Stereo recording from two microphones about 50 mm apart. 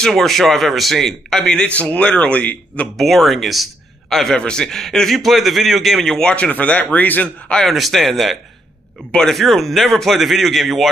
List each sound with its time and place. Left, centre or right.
0.0 s speech: centre
1.6 s speech: left
3.0 s speech: centre
4.4 s speech: centre
4.6 s speech: centre
6.2 s speech: centre
6.5 s speech: left
7.6 s speech: centre